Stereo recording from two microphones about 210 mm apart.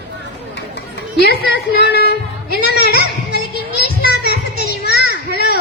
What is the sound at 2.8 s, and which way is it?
Speech, 50° left (ahead or behind).